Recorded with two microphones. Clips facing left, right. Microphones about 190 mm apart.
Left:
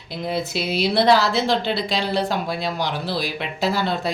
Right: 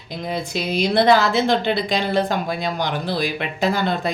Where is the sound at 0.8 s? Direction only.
Centre (ahead or behind).